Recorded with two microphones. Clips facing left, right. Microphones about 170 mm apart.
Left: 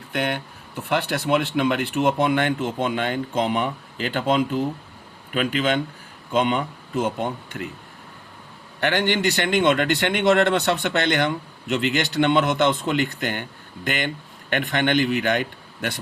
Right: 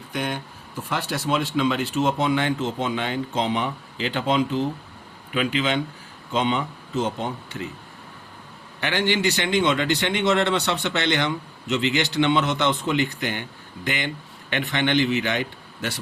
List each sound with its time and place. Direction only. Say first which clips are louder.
0.1 s a man's voice: left 3 dB; 65° left (ahead or behind)
8.8 s a man's voice: left 2 dB; 55° left (ahead or behind)